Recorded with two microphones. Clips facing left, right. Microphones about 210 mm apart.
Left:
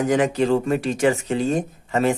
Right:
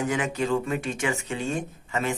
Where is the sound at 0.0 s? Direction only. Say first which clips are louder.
Left 7 dB; 35° left (ahead or behind).